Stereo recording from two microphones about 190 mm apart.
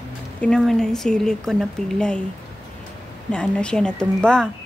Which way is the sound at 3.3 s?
5° left (ahead or behind).